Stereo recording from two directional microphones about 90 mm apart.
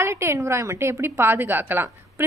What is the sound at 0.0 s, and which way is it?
A woman's voice, 30° right (ahead or behind).